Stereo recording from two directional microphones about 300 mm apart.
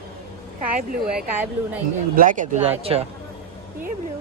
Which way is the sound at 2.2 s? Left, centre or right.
Right.